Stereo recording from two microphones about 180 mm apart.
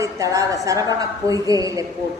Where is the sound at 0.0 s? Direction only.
20° right (ahead or behind).